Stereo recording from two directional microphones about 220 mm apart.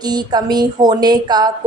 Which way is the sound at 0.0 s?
20° right (ahead or behind).